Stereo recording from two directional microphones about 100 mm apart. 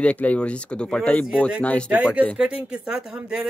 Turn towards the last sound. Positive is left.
turn(degrees=-5)  # may be behind; listen again after turning